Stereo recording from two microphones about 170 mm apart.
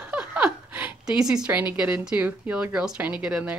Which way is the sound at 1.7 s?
5° right (ahead or behind).